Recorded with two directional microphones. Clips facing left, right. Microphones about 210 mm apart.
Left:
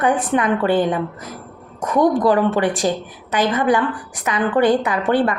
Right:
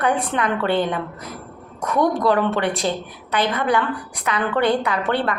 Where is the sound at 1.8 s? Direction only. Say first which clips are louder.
Left 4 dB; 15° left (ahead or behind).